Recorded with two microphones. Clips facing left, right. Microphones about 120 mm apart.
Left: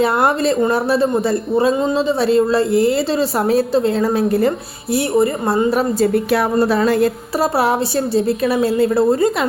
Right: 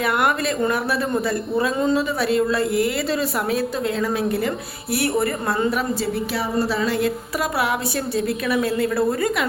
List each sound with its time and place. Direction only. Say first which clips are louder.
0.0 s a woman's voice: left 5 dB; 30° left (ahead or behind)
4.9 s a woman's voice: left 6 dB; 20° left (ahead or behind)
5.7 s a woman's voice: left 8 dB; 50° left (ahead or behind); by 9.5 s 25° left (ahead or behind)